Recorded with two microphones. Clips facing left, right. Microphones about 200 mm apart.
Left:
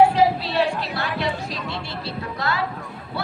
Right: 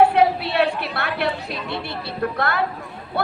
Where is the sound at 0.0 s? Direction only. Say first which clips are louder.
Right 1 dB; 60° right (ahead or behind).